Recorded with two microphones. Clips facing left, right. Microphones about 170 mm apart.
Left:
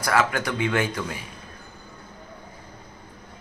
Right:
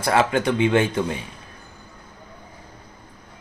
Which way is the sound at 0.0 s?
25° right (ahead or behind).